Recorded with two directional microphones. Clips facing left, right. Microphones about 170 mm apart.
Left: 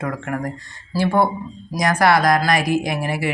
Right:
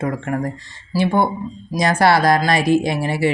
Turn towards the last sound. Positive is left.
turn(degrees=-30)  # may be behind; listen again after turning